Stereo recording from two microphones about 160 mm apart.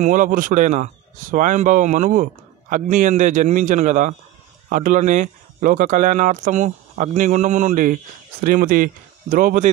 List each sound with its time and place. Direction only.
0.0 s speech: 55° right (ahead or behind)